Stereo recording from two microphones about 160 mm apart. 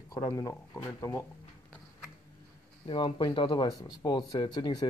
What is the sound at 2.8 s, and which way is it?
Speech, 30° left (ahead or behind).